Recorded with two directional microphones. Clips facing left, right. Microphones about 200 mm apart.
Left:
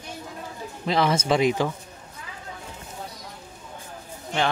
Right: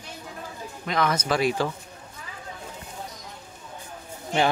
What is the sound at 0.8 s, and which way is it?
Speech, 30° left (ahead or behind).